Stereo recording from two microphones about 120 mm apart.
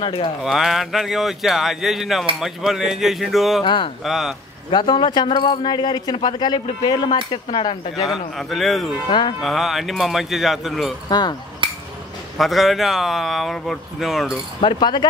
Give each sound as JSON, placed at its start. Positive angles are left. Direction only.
{"t": 0.0, "sound": "speech", "side_deg": 45}
{"t": 0.4, "sound": "speech", "side_deg": -5}
{"t": 3.6, "sound": "speech", "side_deg": 40}
{"t": 4.0, "sound": "speech", "side_deg": 0}
{"t": 4.6, "sound": "speech", "side_deg": 40}
{"t": 7.9, "sound": "speech", "side_deg": 0}
{"t": 11.1, "sound": "speech", "side_deg": 35}
{"t": 12.4, "sound": "speech", "side_deg": 0}
{"t": 14.6, "sound": "speech", "side_deg": 40}